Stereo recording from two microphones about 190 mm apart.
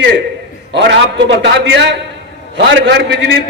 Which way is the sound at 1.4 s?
65° right (ahead or behind).